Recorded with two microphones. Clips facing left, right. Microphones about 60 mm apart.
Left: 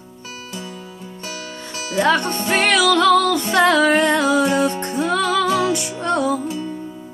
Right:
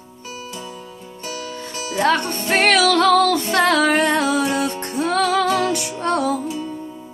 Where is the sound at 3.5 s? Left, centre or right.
Left.